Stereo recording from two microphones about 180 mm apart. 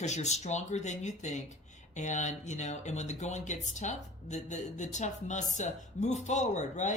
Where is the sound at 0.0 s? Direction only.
40° left (ahead or behind).